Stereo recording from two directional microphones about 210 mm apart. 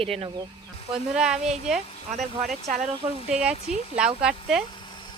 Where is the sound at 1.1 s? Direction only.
5° right (ahead or behind).